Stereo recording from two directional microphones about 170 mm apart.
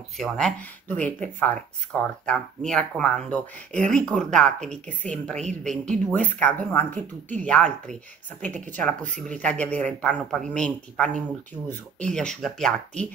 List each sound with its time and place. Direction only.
0.2 s speech: centre (ahead or behind)
9.0 s speech: 45° right (ahead or behind)
9.4 s speech: 10° left (ahead or behind)